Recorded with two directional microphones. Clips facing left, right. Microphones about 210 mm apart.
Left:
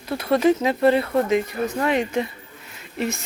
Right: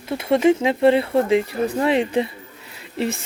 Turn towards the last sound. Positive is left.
turn(degrees=-30)  # may be behind; listen again after turning